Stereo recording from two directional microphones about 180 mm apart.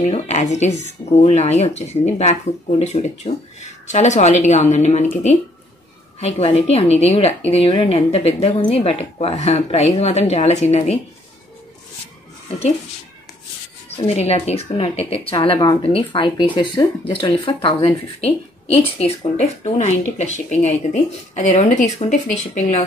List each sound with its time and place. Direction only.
0.0 s speech: 40° left (ahead or behind)
13.8 s speech: 35° left (ahead or behind)